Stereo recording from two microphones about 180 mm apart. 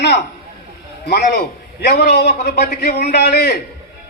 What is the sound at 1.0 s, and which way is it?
A man's voice, 60° left (ahead or behind).